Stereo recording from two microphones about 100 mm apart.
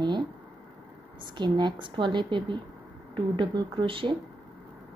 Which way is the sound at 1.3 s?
50° right (ahead or behind).